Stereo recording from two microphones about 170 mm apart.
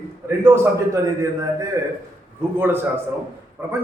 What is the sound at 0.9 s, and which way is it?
A man's voice, 20° right (ahead or behind).